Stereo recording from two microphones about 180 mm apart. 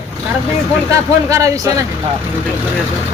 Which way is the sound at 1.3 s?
15° right (ahead or behind).